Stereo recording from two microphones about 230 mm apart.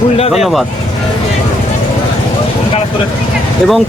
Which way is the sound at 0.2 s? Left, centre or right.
Left.